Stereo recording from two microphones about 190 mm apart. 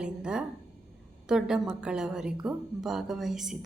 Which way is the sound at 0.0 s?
5° right (ahead or behind).